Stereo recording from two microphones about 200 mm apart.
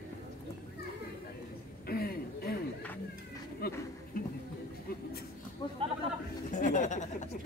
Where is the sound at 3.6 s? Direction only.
50° left (ahead or behind).